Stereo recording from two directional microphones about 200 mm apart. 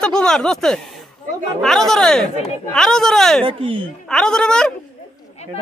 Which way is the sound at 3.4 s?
25° right (ahead or behind).